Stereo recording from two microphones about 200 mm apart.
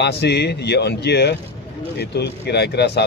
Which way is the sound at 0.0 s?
55° left (ahead or behind).